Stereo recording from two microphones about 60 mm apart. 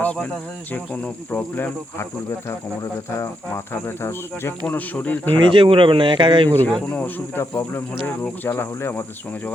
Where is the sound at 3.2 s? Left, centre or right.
Left.